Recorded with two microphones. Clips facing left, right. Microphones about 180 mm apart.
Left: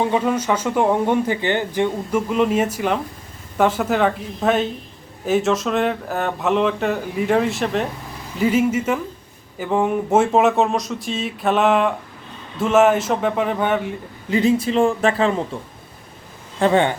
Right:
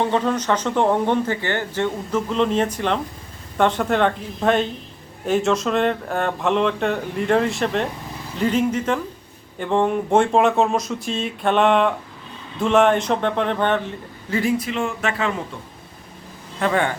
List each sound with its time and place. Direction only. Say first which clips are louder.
0.0 s speech: left 1 dB; 10° left (ahead or behind)
14.3 s a man's voice: left 4 dB; 20° left (ahead or behind)
14.7 s speech: left 7 dB; 35° left (ahead or behind)
16.6 s a man's voice: left 4 dB; 25° left (ahead or behind)